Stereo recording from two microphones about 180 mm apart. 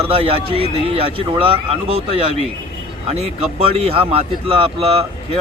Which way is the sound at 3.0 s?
35° right (ahead or behind).